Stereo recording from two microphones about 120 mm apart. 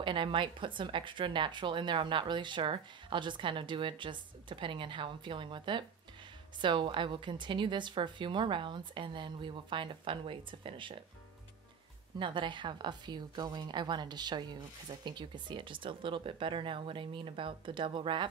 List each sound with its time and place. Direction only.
0.0 s a woman's voice: 45° right (ahead or behind)
12.2 s a woman's voice: 40° right (ahead or behind)